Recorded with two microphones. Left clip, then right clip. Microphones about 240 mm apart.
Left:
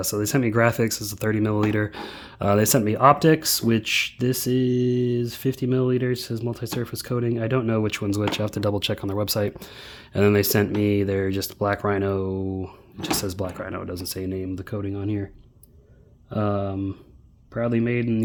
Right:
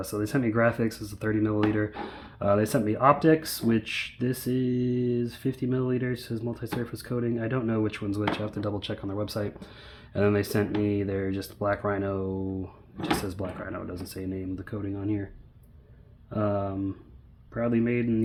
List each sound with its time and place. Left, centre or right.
0.0 s speech: left
16.3 s speech: left